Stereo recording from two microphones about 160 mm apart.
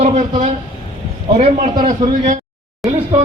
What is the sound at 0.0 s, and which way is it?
Speech, 45° right (ahead or behind).